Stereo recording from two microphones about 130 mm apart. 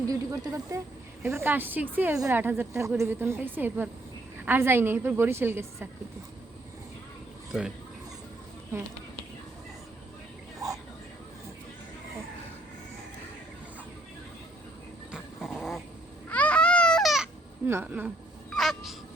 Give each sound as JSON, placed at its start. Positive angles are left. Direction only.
{"t": 0.1, "sound": "a woman's voice", "side_deg": -25}
{"t": 15.1, "sound": "dog", "side_deg": -5}
{"t": 16.3, "sound": "baby cry", "side_deg": 10}
{"t": 17.7, "sound": "a woman's voice", "side_deg": -15}
{"t": 18.5, "sound": "a sound", "side_deg": 0}